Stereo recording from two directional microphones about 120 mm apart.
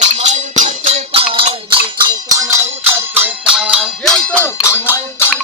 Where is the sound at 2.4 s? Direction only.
20° right (ahead or behind); by 4.3 s 5° left (ahead or behind).